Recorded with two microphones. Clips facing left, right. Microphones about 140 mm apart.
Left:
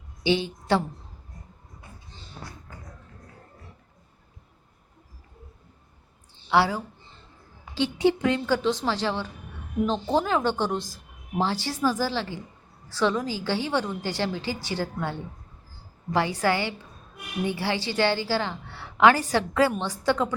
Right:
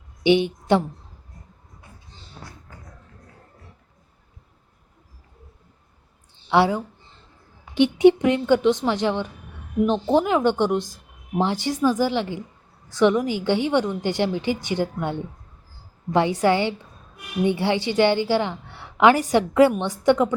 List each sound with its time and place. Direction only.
0.3 s a woman's voice: 20° right (ahead or behind)
6.5 s speech: 20° right (ahead or behind)
7.8 s a woman's voice: 20° right (ahead or behind)
16.1 s a woman's voice: 20° right (ahead or behind)